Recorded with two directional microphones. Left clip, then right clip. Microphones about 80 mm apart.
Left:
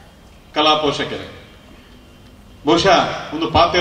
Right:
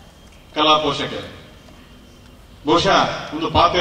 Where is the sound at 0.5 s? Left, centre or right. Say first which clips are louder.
Left 1 dB; left.